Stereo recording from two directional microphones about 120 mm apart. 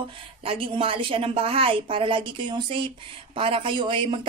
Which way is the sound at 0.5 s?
50° right (ahead or behind).